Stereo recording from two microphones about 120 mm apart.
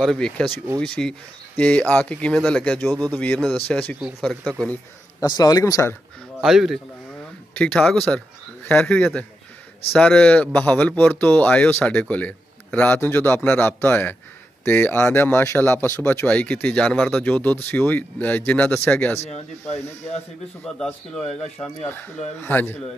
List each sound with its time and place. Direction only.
0.0 s a man's voice: 5° left (ahead or behind)
3.3 s a man's voice: centre (ahead or behind)
3.6 s a man's voice: 10° left (ahead or behind)
5.2 s speech: 30° left (ahead or behind)
6.4 s a man's voice: centre (ahead or behind)
7.5 s speech: 10° left (ahead or behind)
19.1 s speech: 65° left (ahead or behind)
20.6 s a man's voice: 5° left (ahead or behind)
21.8 s speech: 15° left (ahead or behind)